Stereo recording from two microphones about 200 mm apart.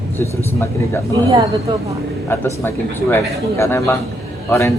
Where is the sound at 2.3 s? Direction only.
10° left (ahead or behind).